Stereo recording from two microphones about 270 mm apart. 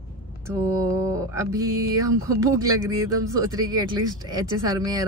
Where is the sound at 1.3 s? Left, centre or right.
Centre.